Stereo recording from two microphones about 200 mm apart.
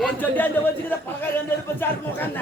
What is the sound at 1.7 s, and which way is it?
Speech, 10° left (ahead or behind).